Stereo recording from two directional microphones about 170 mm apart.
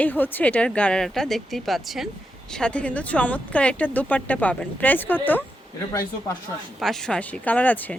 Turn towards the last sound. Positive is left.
turn(degrees=10)  # may be behind; listen again after turning